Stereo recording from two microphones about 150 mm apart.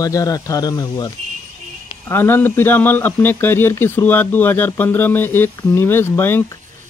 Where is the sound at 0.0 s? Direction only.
25° left (ahead or behind).